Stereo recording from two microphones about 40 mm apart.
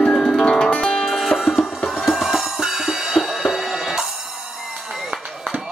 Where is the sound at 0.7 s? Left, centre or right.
Left.